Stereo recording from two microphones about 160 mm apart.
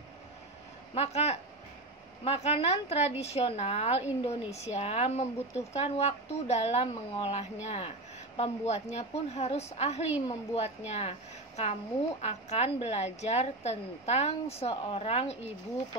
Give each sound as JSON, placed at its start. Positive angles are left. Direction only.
{"t": 0.9, "sound": "a woman's voice", "side_deg": 40}